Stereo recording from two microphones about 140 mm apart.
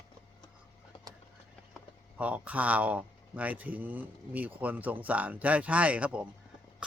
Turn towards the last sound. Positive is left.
turn(degrees=-10)  # may be behind; listen again after turning